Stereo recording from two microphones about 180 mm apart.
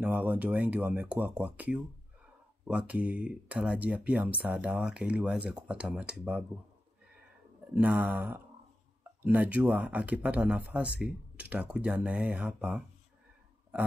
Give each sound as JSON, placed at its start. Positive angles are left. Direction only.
{"t": 0.0, "sound": "speech", "side_deg": -10}
{"t": 7.7, "sound": "speech", "side_deg": -10}